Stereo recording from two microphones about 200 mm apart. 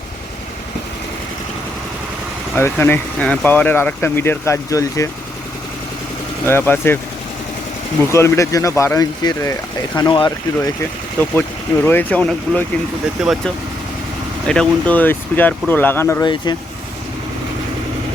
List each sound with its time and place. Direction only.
2.6 s speech: 10° left (ahead or behind)
6.4 s speech: 10° left (ahead or behind)
8.1 s speech: 15° left (ahead or behind)
11.2 s speech: 10° left (ahead or behind)
16.2 s speech: 20° left (ahead or behind)